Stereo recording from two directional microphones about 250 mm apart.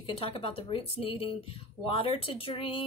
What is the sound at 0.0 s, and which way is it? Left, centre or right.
Speech, left.